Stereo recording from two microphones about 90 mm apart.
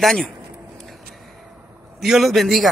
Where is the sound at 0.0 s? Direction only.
5° left (ahead or behind).